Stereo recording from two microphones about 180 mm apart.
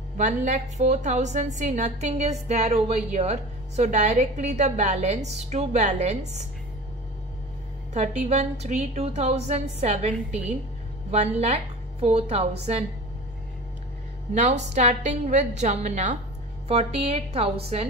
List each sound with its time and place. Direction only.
0.2 s a woman's voice: 40° right (ahead or behind)
7.9 s a woman's voice: 35° right (ahead or behind)
14.3 s a woman's voice: 40° right (ahead or behind)